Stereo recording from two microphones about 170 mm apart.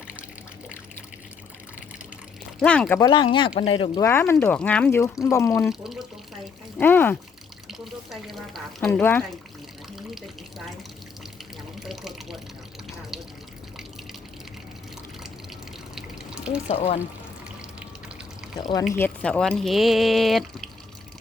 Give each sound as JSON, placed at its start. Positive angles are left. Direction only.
{"t": 2.6, "sound": "speech", "side_deg": 5}
{"t": 3.0, "sound": "speech", "side_deg": 25}
{"t": 4.0, "sound": "speech", "side_deg": 15}
{"t": 5.6, "sound": "speech", "side_deg": 0}
{"t": 6.7, "sound": "speech", "side_deg": 10}
{"t": 7.7, "sound": "speech", "side_deg": 0}
{"t": 11.8, "sound": "water", "side_deg": 0}
{"t": 16.0, "sound": "water", "side_deg": -5}
{"t": 16.6, "sound": "speech", "side_deg": 40}
{"t": 18.9, "sound": "speech", "side_deg": 10}